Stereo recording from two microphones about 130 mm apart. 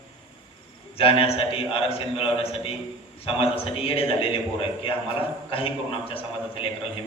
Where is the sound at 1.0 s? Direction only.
45° left (ahead or behind).